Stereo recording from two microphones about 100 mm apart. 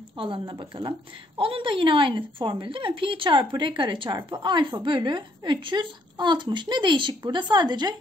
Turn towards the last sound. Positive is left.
turn(degrees=-45)  # may be behind; listen again after turning